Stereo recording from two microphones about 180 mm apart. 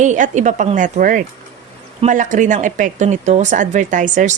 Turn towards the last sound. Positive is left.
turn(degrees=-45)  # may be behind; listen again after turning